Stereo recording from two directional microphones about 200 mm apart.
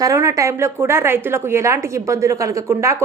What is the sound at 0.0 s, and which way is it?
A woman's voice, 15° right (ahead or behind).